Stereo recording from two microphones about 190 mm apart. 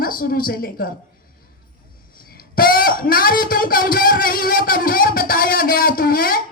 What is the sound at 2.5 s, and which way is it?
Speech, 50° left (ahead or behind).